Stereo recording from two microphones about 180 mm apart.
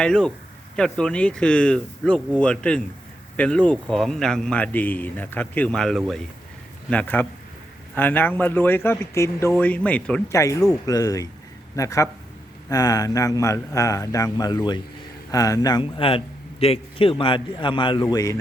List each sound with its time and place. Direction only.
0.0 s a man's voice: 5° left (ahead or behind)